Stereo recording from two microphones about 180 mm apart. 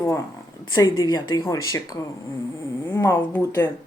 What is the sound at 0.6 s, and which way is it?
Speech, 20° left (ahead or behind).